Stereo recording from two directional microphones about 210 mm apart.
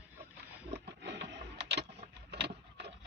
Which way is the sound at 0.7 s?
55° right (ahead or behind).